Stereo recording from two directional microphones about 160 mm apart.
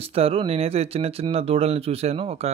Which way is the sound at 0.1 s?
40° right (ahead or behind).